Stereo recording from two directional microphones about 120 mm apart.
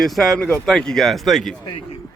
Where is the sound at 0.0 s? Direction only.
Centre (ahead or behind).